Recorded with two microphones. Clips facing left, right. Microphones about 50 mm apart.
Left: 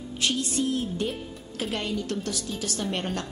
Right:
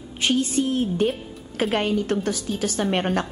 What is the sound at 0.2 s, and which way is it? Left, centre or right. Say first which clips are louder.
A woman's voice: right 5 dB; right.